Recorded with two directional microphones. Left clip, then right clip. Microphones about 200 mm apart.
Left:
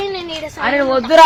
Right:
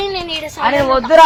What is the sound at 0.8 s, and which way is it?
Speech, 30° left (ahead or behind).